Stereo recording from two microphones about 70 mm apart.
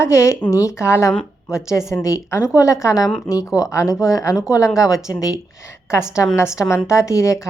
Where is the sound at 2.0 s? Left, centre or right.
Left.